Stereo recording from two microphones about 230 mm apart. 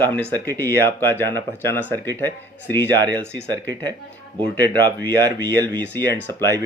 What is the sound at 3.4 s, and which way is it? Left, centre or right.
Speech, centre.